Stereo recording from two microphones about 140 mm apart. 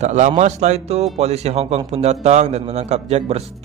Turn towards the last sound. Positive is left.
turn(degrees=-50)  # may be behind; listen again after turning